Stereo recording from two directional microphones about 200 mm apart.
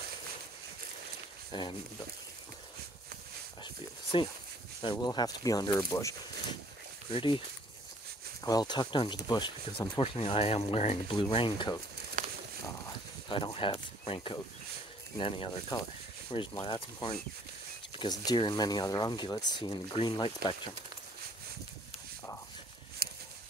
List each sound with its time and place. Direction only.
1.5 s speech: 25° left (ahead or behind)
3.6 s a sound: 25° left (ahead or behind)
4.8 s speech: 20° left (ahead or behind)
7.1 s speech: 25° left (ahead or behind)
8.5 s speech: 20° left (ahead or behind)
13.3 s speech: 25° left (ahead or behind)
23.0 s a sound: 50° right (ahead or behind)